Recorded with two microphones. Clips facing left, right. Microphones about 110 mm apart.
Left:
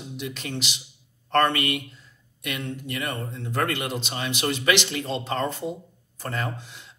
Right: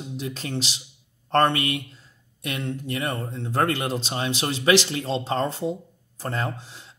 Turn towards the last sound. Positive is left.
turn(degrees=-35)  # may be behind; listen again after turning